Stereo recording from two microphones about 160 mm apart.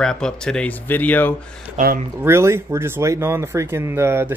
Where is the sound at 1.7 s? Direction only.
60° right (ahead or behind).